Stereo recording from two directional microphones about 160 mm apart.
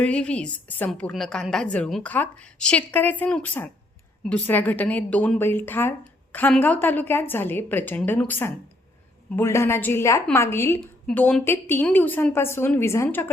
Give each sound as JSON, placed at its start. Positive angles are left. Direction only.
{"t": 0.0, "sound": "a woman's voice", "side_deg": 5}